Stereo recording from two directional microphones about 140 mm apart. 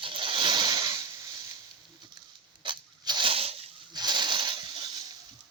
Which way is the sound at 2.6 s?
35° right (ahead or behind).